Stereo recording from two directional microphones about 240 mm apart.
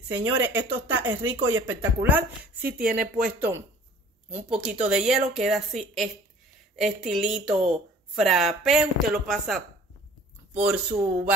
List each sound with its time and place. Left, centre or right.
0.1 s speech: right
1.7 s speech: centre
2.8 s speech: right
4.3 s speech: centre